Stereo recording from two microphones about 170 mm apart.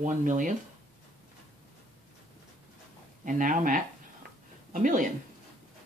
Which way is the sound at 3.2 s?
50° right (ahead or behind).